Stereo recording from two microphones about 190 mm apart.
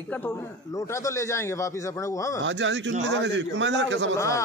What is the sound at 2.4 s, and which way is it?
A man's voice, 70° right (ahead or behind).